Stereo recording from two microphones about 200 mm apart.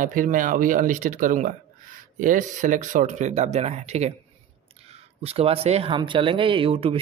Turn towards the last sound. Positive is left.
turn(degrees=-30)  # may be behind; listen again after turning